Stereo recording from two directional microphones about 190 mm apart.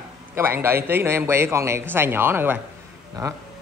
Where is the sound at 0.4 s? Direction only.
10° right (ahead or behind).